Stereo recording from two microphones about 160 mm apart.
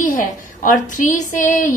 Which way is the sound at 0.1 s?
55° left (ahead or behind).